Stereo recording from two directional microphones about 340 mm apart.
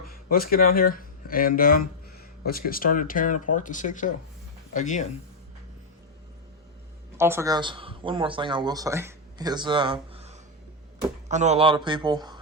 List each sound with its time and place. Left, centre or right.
0.0 s speech: left
7.2 s speech: centre